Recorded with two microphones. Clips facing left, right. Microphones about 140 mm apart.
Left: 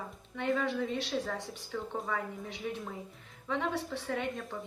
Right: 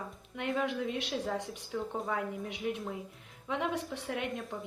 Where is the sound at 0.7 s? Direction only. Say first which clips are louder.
Left 1 dB; 15° right (ahead or behind).